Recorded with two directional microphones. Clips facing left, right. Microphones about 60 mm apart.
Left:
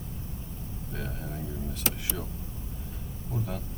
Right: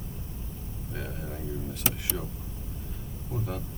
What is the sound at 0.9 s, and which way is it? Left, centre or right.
Speech, centre.